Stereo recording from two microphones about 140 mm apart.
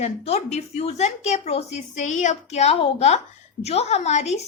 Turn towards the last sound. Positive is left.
turn(degrees=55)  # may be behind; listen again after turning